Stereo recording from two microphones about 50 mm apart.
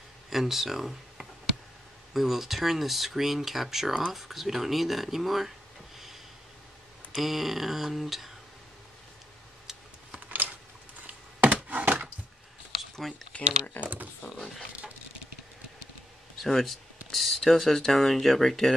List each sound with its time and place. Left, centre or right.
0.3 s a sound: centre
2.1 s speech: centre
7.2 s speech: centre
11.4 s a sound: right
13.0 s speech: centre
13.8 s speech: left
14.2 s speech: left
16.3 s speech: centre